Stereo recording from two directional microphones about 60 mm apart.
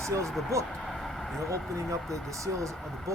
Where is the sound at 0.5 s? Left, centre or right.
Right.